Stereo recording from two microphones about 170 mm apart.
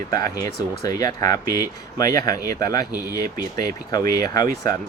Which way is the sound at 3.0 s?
65° right (ahead or behind).